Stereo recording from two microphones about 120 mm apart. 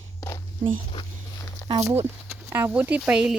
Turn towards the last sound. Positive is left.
turn(degrees=-10)  # may be behind; listen again after turning